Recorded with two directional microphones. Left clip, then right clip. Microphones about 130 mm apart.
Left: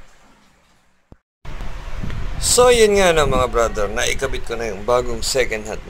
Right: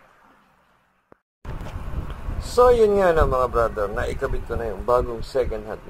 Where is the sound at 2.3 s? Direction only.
15° left (ahead or behind).